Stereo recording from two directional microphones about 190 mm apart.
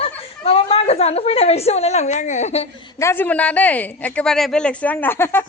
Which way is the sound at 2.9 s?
10° left (ahead or behind).